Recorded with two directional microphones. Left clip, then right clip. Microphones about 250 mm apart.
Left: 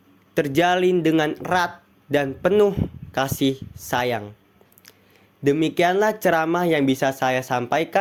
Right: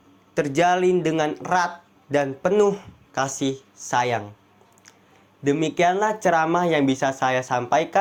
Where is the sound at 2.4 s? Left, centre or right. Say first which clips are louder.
Left 2 dB; left.